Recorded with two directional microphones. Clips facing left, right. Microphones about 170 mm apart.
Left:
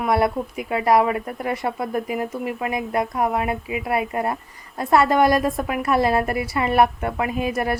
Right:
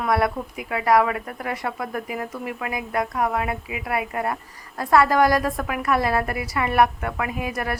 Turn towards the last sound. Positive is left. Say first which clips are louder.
# left 4 dB
turn(degrees=25)  # may be behind; listen again after turning